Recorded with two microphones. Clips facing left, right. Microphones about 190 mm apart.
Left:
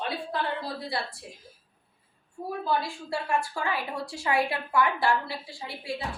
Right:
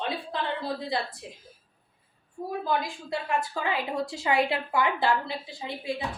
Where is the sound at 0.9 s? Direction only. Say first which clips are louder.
Right 2 dB; 20° right (ahead or behind).